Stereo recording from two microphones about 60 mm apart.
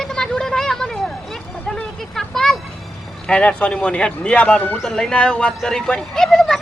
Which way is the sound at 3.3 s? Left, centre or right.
Centre.